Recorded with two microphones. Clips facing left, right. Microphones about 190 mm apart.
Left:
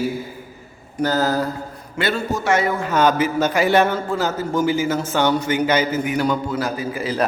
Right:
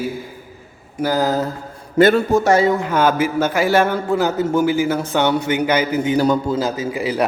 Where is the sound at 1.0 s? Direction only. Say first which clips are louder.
Right 1 dB; 15° right (ahead or behind).